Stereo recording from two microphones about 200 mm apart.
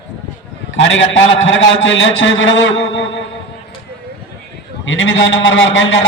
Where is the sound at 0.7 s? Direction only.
70° left (ahead or behind).